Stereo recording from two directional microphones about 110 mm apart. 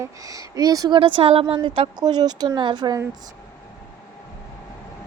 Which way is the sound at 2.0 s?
40° right (ahead or behind).